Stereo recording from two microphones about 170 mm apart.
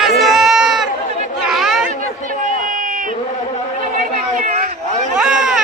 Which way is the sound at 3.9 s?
50° right (ahead or behind).